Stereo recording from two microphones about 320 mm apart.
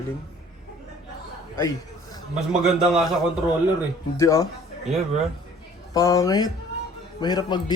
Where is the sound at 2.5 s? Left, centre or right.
Centre.